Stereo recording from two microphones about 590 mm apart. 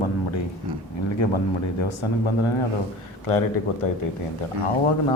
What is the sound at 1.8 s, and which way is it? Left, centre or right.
A man's voice, left.